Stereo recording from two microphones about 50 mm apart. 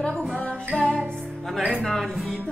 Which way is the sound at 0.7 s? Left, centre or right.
Centre.